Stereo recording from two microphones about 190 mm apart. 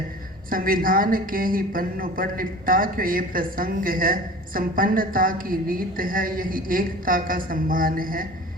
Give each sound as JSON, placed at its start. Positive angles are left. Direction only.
{"t": 0.5, "sound": "a woman's voice", "side_deg": -45}